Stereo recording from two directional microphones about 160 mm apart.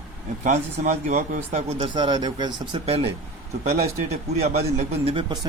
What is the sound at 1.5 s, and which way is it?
Speech, 30° right (ahead or behind).